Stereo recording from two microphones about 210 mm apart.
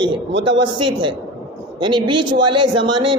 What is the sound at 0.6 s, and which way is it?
Speech, 20° right (ahead or behind).